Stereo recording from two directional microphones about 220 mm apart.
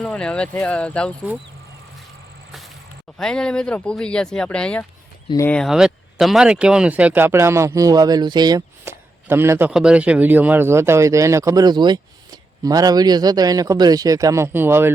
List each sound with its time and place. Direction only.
0.0 s speech: 5° left (ahead or behind)
3.2 s speech: 5° left (ahead or behind)